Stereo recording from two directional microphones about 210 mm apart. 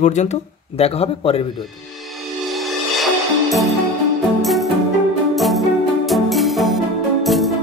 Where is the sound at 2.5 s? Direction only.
Centre (ahead or behind).